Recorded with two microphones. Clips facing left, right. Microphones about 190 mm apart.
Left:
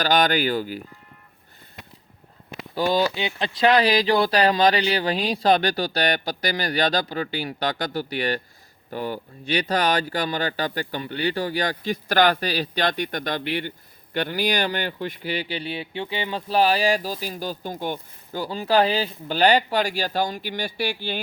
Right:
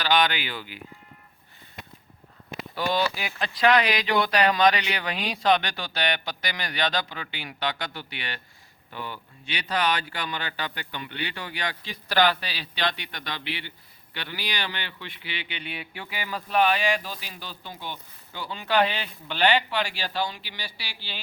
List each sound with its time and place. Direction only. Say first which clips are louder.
0.0 s speech: left 4 dB; 45° left (ahead or behind)
2.7 s speech: left 5 dB; 40° left (ahead or behind)
3.2 s speech: left 4 dB; 25° left (ahead or behind); by 21.2 s 50° left (ahead or behind)